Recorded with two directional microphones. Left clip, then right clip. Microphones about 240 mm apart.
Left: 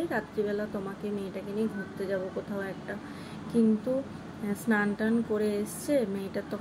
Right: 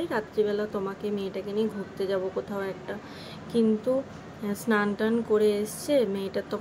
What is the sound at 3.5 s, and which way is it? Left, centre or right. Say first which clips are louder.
Speech: right 3 dB; centre.